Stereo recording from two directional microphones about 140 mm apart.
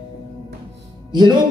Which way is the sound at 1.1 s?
30° right (ahead or behind).